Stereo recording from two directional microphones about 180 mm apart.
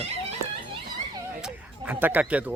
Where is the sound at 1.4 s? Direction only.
10° right (ahead or behind).